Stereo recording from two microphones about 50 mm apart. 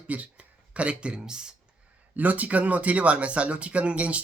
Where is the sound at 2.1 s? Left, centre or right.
Right.